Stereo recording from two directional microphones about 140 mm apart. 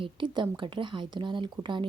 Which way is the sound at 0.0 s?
35° right (ahead or behind).